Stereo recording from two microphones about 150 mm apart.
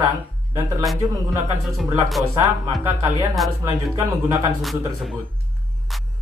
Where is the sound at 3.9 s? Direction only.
20° right (ahead or behind).